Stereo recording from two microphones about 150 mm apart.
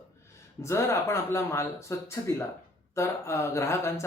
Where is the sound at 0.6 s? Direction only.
20° left (ahead or behind).